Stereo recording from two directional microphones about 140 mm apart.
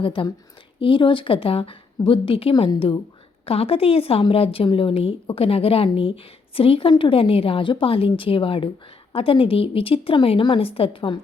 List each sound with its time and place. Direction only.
0.0 s a woman's voice: 40° left (ahead or behind)